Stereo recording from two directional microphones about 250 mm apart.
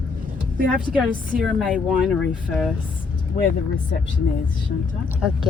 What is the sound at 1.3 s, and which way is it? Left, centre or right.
Speech, right.